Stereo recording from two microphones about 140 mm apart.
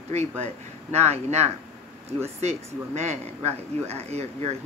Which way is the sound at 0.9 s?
50° right (ahead or behind).